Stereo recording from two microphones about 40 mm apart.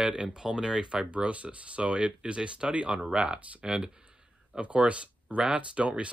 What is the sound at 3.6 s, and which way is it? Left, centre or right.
Speech, centre.